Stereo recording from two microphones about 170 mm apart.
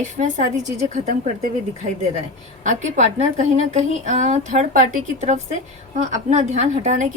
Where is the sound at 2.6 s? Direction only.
45° right (ahead or behind).